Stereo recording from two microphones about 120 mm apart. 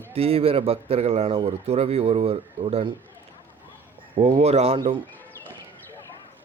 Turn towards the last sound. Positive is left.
turn(degrees=-60)  # may be behind; listen again after turning